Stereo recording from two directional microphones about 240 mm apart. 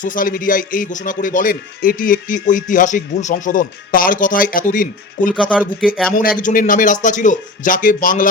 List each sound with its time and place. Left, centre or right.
0.0 s a man's voice: left
5.3 s speech: centre
6.4 s a man's voice: left